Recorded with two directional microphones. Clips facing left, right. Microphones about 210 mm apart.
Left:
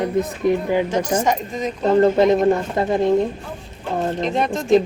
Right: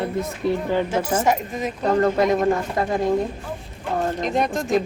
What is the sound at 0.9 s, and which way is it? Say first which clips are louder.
Speech: left 1 dB; 5° right (ahead or behind).